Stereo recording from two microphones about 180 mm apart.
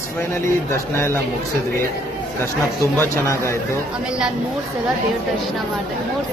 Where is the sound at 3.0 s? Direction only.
15° left (ahead or behind).